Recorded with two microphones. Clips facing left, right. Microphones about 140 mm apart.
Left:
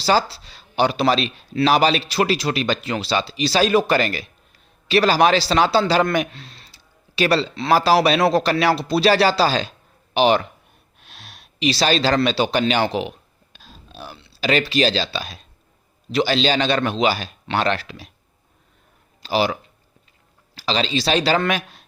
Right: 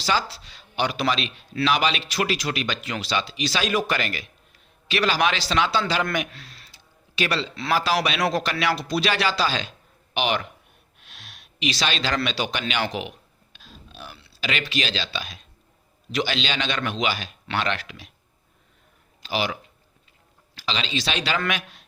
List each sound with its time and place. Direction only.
0.0 s a man's voice: 35° left (ahead or behind)
11.0 s a sound: 35° left (ahead or behind)
14.4 s speech: 35° left (ahead or behind)
19.2 s speech: 35° left (ahead or behind)
20.6 s speech: 35° left (ahead or behind)